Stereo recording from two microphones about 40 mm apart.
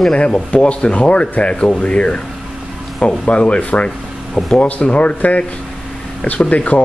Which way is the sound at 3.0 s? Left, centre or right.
Left.